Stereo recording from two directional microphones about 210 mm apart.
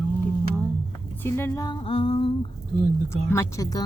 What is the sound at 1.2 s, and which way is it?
A woman's voice, 15° left (ahead or behind).